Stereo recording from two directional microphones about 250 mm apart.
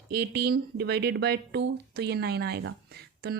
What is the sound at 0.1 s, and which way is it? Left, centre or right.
Speech, right.